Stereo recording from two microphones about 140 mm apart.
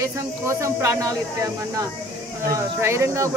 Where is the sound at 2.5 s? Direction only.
20° right (ahead or behind).